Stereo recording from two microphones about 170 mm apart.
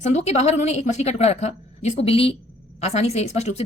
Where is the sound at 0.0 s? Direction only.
40° left (ahead or behind).